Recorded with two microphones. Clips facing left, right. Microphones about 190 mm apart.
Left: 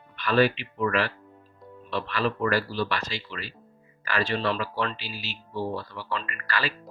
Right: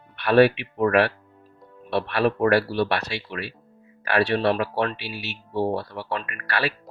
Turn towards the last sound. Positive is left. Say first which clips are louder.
# right 4 dB
turn(degrees=-65)  # may be behind; listen again after turning